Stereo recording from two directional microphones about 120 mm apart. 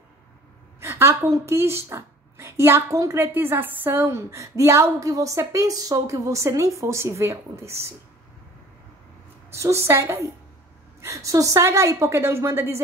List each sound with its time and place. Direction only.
0.7 s a woman's voice: 20° right (ahead or behind)
9.5 s a woman's voice: 25° right (ahead or behind)